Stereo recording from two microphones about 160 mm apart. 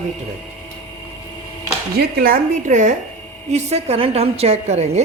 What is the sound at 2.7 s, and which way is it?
A woman's voice, 50° right (ahead or behind).